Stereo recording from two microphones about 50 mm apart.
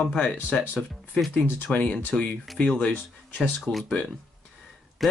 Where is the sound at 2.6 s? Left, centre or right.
Left.